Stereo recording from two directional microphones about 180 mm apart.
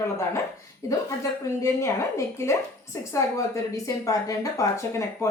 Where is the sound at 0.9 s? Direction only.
15° left (ahead or behind).